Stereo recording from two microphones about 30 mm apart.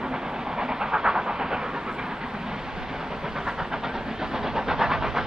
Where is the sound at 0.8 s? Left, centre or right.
Right.